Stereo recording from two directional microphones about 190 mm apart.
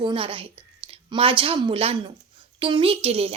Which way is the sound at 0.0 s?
25° right (ahead or behind).